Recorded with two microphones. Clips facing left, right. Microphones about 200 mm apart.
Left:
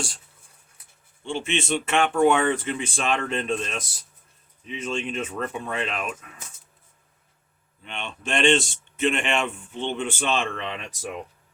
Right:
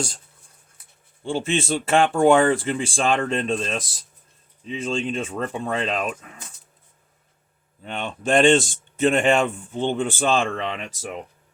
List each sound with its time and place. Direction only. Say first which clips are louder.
1.2 s speech: right 4 dB; 35° right (ahead or behind)
7.9 s speech: right 8 dB; 35° right (ahead or behind)